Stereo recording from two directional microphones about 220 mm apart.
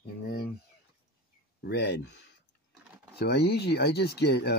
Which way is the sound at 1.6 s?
50° left (ahead or behind).